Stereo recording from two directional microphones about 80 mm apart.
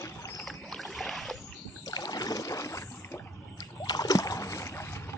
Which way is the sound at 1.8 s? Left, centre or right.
Left.